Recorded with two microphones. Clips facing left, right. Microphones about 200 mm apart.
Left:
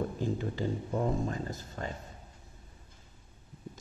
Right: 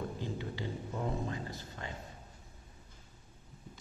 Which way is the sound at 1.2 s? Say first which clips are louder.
Left 4 dB; 45° left (ahead or behind).